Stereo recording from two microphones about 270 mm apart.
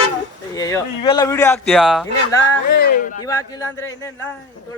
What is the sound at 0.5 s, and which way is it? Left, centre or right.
Speech, centre.